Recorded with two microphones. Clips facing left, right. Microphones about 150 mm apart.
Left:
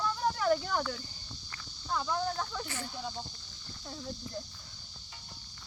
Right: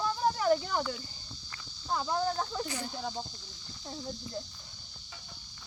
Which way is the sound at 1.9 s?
30° right (ahead or behind).